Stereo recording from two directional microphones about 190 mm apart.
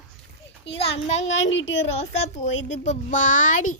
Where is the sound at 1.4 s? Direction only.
75° left (ahead or behind).